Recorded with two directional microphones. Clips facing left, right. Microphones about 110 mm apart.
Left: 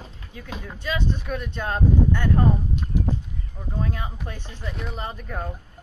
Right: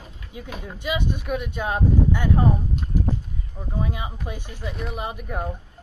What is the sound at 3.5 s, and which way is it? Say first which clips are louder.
Speech: right 1 dB; 10° right (ahead or behind).